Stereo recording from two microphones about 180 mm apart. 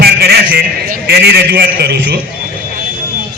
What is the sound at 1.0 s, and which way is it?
Speech, 65° right (ahead or behind).